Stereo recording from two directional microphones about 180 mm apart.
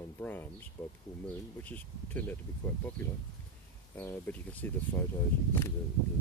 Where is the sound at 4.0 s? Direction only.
10° left (ahead or behind).